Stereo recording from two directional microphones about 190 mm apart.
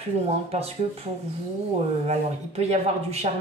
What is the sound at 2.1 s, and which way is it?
Speech, 35° right (ahead or behind).